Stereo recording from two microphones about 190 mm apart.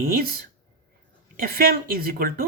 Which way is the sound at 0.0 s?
50° right (ahead or behind).